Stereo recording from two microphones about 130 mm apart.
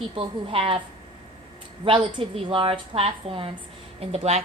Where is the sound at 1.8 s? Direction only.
40° right (ahead or behind).